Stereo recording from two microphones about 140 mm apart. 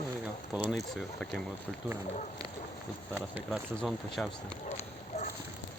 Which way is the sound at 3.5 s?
Centre (ahead or behind).